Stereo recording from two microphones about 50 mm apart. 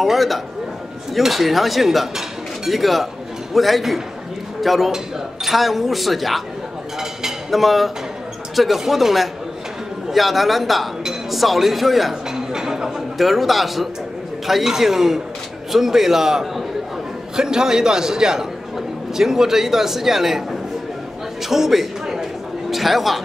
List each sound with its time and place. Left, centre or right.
0.0 s speech: centre
7.0 s a sound: centre
8.5 s a man's voice: centre
21.5 s a man's voice: centre